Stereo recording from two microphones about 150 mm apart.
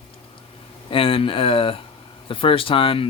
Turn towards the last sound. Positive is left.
turn(degrees=35)  # may be behind; listen again after turning